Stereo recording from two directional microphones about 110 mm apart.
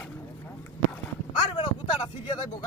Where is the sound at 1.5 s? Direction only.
45° left (ahead or behind).